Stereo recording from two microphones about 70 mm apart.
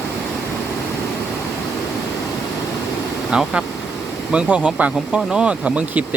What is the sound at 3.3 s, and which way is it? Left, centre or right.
Speech, centre.